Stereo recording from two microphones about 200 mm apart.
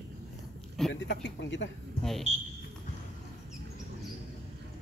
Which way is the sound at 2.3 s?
35° right (ahead or behind).